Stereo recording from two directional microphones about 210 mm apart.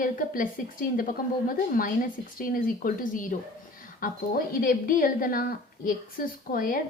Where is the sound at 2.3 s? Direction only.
40° left (ahead or behind).